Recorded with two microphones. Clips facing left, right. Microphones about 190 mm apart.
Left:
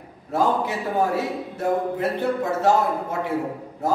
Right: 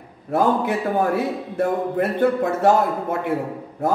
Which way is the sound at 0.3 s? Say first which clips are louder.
Right 3 dB; 55° right (ahead or behind).